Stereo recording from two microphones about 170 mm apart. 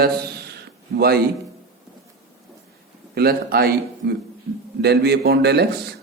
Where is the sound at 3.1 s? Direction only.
65° right (ahead or behind).